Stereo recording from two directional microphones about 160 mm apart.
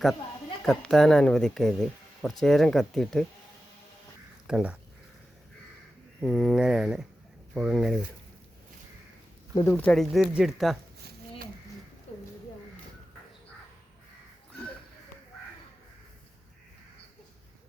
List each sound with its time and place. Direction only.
0.6 s speech: 5° left (ahead or behind)
4.4 s speech: 5° right (ahead or behind)
6.1 s speech: 5° left (ahead or behind)
9.6 s speech: 10° left (ahead or behind)
12.1 s a sound: 40° left (ahead or behind)